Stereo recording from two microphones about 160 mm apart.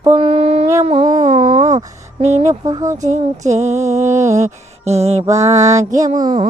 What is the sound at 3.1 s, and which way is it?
Speech, 45° right (ahead or behind).